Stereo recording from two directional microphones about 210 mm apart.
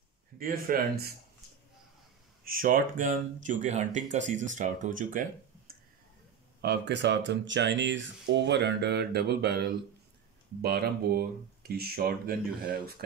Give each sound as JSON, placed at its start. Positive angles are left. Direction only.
{"t": 0.4, "sound": "speech", "side_deg": -45}
{"t": 2.4, "sound": "speech", "side_deg": -40}
{"t": 6.6, "sound": "speech", "side_deg": -55}